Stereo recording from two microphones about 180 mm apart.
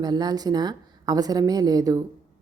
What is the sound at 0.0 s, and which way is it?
Speech, 20° right (ahead or behind).